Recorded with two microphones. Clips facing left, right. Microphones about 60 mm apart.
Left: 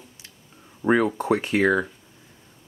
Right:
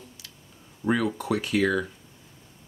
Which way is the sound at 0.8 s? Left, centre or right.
Left.